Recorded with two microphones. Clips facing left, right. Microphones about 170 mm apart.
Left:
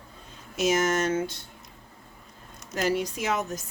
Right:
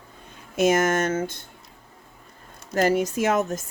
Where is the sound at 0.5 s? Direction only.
55° right (ahead or behind).